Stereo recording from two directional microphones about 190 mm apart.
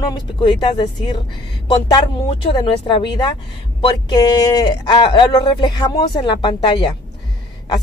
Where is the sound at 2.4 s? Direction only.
25° left (ahead or behind).